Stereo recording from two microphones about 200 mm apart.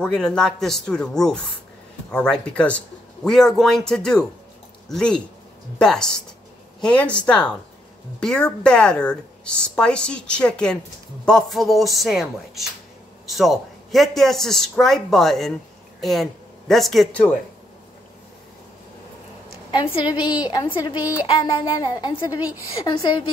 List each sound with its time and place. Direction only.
0.0 s speech: 5° left (ahead or behind)
19.7 s speech: 25° left (ahead or behind)